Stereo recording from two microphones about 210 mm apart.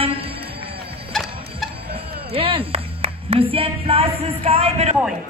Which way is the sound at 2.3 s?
25° right (ahead or behind).